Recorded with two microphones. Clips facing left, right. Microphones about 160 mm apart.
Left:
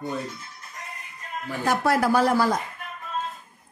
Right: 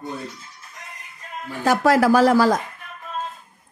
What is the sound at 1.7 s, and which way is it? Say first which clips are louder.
Speech: right 5 dB; 90° right.